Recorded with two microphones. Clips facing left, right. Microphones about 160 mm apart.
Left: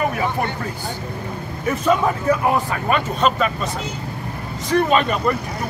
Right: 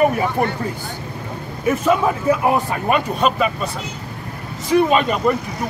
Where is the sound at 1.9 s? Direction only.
10° right (ahead or behind).